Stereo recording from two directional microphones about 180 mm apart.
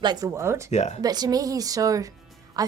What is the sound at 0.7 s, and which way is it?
Speech, 40° left (ahead or behind).